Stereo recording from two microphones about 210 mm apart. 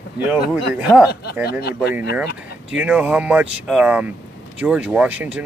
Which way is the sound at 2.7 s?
5° right (ahead or behind).